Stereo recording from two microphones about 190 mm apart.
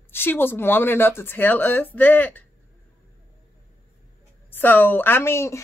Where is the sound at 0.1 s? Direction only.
10° left (ahead or behind).